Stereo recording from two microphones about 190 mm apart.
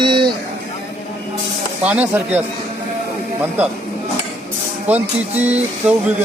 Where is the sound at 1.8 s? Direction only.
10° right (ahead or behind).